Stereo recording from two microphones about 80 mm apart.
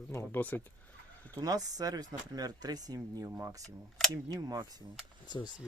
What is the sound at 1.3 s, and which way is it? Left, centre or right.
Speech, right.